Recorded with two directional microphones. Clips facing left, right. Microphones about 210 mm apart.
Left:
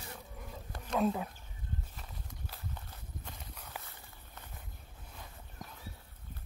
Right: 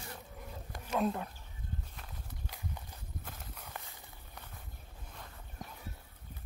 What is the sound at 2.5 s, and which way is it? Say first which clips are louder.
Horse: right 2 dB; 15° right (ahead or behind).